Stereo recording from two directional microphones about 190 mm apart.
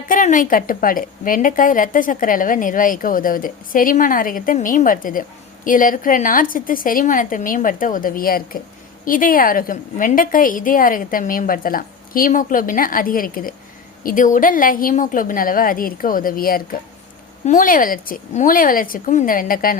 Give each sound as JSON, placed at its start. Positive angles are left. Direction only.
{"t": 0.1, "sound": "a woman's voice", "side_deg": 45}